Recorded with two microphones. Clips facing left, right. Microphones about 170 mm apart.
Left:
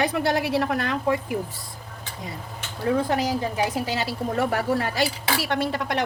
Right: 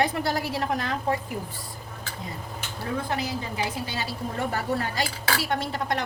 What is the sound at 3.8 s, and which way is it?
A woman's voice, 80° left.